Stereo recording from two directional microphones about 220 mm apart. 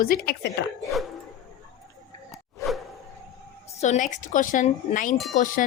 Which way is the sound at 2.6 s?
15° left (ahead or behind).